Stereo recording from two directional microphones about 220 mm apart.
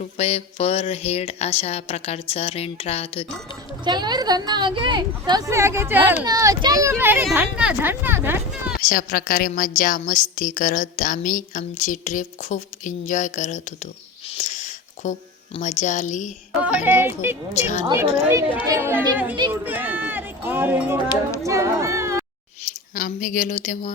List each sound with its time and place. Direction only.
0.0 s speech: 30° left (ahead or behind)
3.8 s speech: 20° right (ahead or behind)
8.8 s a woman's voice: 40° left (ahead or behind)
14.3 s a sound: 30° left (ahead or behind)
15.5 s a woman's voice: 35° left (ahead or behind)
16.8 s speech: 10° right (ahead or behind)
17.5 s a woman's voice: 30° left (ahead or behind)
17.8 s speech: 15° right (ahead or behind)
22.6 s speech: 35° left (ahead or behind)